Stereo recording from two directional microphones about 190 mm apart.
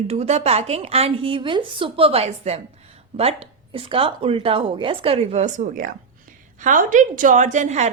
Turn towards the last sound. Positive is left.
turn(degrees=-40)  # may be behind; listen again after turning